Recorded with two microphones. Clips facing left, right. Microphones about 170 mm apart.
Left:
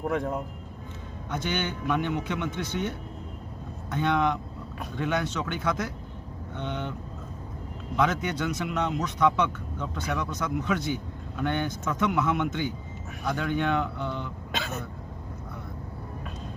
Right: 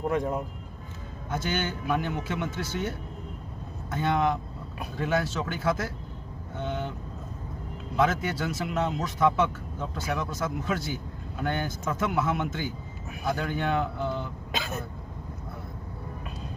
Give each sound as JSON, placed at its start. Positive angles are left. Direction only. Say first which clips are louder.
{"t": 0.1, "sound": "speech", "louder": "right 1 dB", "side_deg": -5}
{"t": 7.9, "sound": "speech", "louder": "even", "side_deg": 0}
{"t": 13.8, "sound": "speech", "louder": "right 2 dB", "side_deg": -40}
{"t": 14.5, "sound": "speech", "louder": "even", "side_deg": 0}